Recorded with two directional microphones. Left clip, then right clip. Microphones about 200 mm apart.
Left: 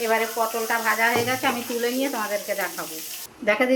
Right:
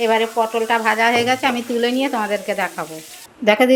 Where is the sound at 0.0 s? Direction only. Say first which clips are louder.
Right 6 dB; 50° right (ahead or behind).